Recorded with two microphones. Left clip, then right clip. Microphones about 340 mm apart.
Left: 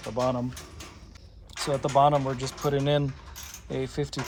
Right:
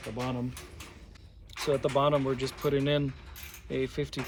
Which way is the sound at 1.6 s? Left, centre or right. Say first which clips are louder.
Left 4 dB; centre.